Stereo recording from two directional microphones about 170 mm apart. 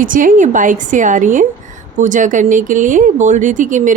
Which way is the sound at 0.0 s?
50° right (ahead or behind).